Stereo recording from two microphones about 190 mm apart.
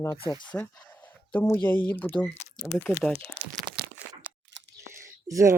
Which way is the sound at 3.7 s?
25° right (ahead or behind).